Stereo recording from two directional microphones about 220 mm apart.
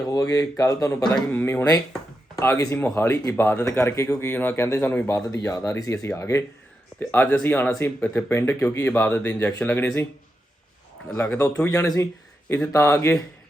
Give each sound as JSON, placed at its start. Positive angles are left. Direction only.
{"t": 0.1, "sound": "speech", "side_deg": 15}
{"t": 1.0, "sound": "speech", "side_deg": 5}
{"t": 11.1, "sound": "speech", "side_deg": 10}